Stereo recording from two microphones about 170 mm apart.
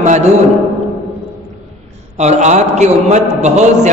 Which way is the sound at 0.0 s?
45° right (ahead or behind).